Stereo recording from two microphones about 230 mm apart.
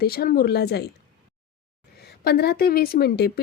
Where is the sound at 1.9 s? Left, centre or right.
Left.